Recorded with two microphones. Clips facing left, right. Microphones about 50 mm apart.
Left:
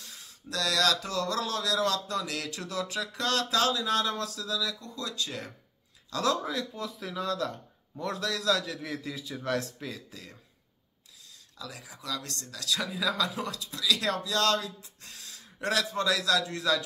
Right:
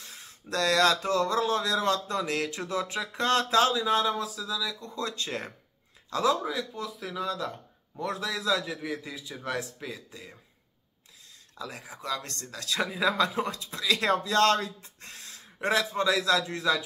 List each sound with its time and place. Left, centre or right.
0.0 s speech: right; by 4.7 s centre
4.7 s speech: right
6.2 s a man's voice: centre
11.5 s speech: right